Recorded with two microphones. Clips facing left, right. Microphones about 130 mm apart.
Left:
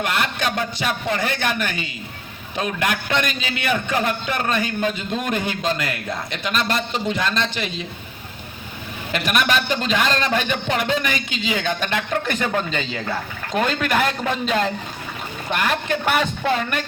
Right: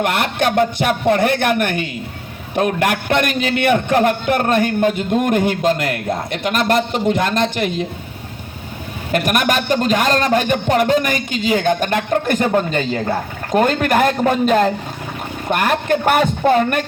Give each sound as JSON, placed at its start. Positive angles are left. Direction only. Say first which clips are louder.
{"t": 0.0, "sound": "a man's voice", "louder": "right 5 dB", "side_deg": -55}
{"t": 9.1, "sound": "a man's voice", "louder": "right 4 dB", "side_deg": -50}